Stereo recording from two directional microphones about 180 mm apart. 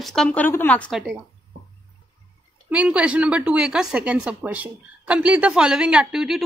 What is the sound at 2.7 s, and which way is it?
Speech, 5° right (ahead or behind).